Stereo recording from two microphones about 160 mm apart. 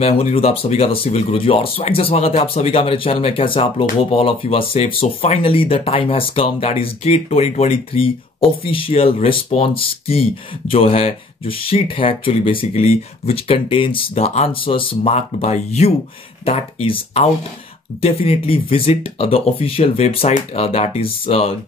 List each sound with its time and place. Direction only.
0.0 s speech: 40° left (ahead or behind)